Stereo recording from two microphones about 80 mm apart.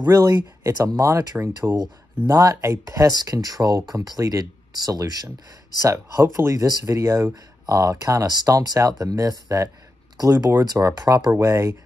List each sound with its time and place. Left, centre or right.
0.0 s speech: right
1.7 s speech: right
5.9 s speech: right
8.3 s speech: right
11.3 s speech: right